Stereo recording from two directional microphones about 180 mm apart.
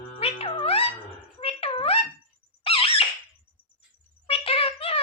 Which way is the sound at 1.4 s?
35° left (ahead or behind).